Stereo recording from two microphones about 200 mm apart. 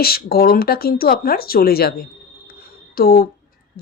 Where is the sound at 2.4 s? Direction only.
50° left (ahead or behind).